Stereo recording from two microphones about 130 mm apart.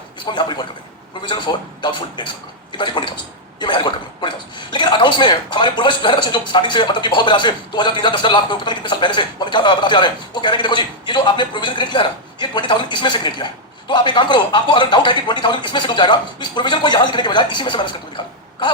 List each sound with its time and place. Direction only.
0.3 s a man's voice: 35° left (ahead or behind)